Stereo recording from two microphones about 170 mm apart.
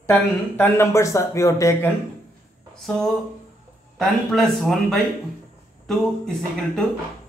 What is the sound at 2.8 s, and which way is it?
A man's voice, centre (ahead or behind).